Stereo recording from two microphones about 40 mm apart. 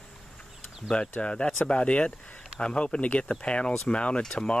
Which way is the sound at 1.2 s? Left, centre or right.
Left.